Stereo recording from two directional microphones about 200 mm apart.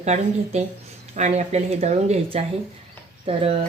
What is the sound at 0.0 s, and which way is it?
Speech, 35° right (ahead or behind).